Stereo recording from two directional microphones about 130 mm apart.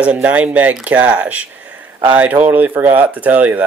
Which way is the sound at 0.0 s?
10° right (ahead or behind).